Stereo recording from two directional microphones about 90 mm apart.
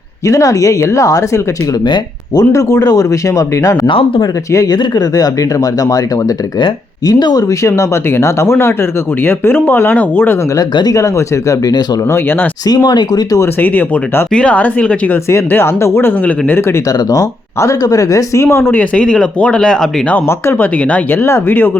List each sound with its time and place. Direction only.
0.3 s speech: 40° left (ahead or behind)
1.8 s speech: 50° left (ahead or behind)
3.8 s speech: 70° left (ahead or behind)
4.5 s speech: 40° left (ahead or behind)
7.6 s speech: 30° left (ahead or behind)
10.6 s speech: 45° left (ahead or behind)
12.1 s speech: 25° left (ahead or behind)
12.6 s speech: 50° left (ahead or behind)
13.4 s speech: 20° left (ahead or behind)
15.3 s speech: 30° left (ahead or behind)
17.1 s speech: 40° left (ahead or behind); by 20.1 s 5° left (ahead or behind)
20.1 s speech: 25° left (ahead or behind)